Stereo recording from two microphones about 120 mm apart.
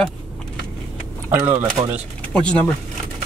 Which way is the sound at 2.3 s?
10° left (ahead or behind).